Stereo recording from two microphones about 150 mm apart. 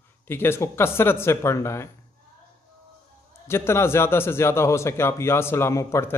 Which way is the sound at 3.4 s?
15° left (ahead or behind).